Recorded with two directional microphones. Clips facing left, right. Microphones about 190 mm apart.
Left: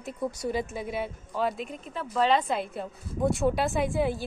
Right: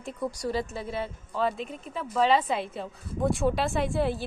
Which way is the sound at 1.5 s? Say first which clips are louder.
Even; centre (ahead or behind).